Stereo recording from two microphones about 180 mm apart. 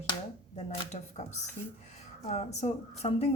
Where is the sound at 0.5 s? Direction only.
40° left (ahead or behind).